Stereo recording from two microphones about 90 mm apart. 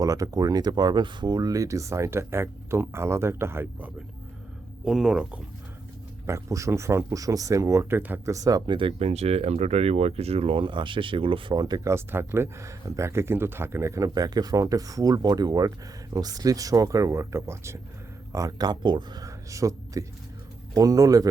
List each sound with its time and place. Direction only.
0.0 s speech: 40° right (ahead or behind)
4.9 s speech: 5° right (ahead or behind)
6.2 s speech: 35° right (ahead or behind)
8.2 s speech: 40° right (ahead or behind)
8.6 s speech: 65° right (ahead or behind)
10.1 s speech: 90° right
11.5 s speech: 45° right (ahead or behind)
11.9 s speech: 30° right (ahead or behind); by 19.2 s 55° right (ahead or behind)
19.2 s speech: 35° right (ahead or behind)